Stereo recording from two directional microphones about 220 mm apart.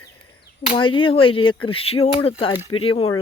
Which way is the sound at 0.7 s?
25° left (ahead or behind).